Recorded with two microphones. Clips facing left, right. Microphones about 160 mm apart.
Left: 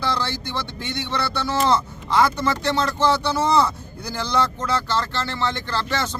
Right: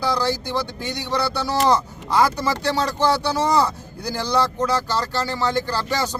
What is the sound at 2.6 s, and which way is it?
Speech, 35° right (ahead or behind).